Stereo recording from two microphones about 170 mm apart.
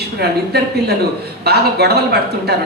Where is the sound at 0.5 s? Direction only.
70° right (ahead or behind).